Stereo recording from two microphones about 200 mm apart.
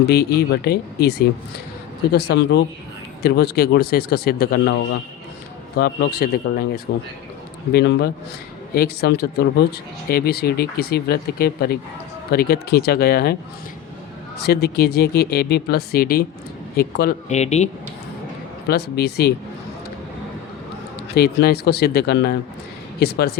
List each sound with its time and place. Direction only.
0.1 s speech: 55° left (ahead or behind)
2.1 s speech: 55° left (ahead or behind)
14.4 s speech: 55° left (ahead or behind); by 17.7 s 35° left (ahead or behind)
18.7 s speech: 55° left (ahead or behind)
21.2 s speech: 55° left (ahead or behind)